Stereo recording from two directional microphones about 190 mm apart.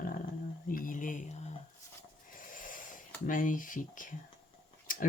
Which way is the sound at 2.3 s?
45° left (ahead or behind).